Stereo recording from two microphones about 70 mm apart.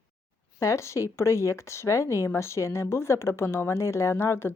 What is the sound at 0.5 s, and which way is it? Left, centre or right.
A woman's voice, left.